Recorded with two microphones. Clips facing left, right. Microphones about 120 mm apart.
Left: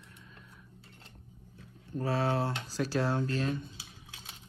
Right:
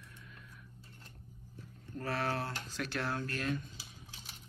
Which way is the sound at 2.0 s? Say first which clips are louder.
Left 6 dB; 25° left (ahead or behind).